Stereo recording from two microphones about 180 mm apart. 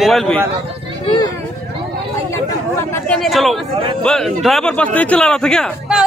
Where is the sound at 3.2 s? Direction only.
Centre (ahead or behind).